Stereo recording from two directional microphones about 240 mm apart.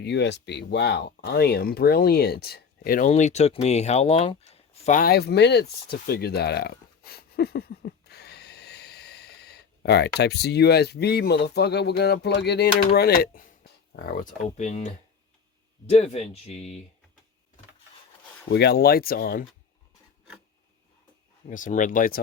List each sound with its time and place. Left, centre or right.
0.0 s speech: left
18.5 s speech: left
21.5 s speech: left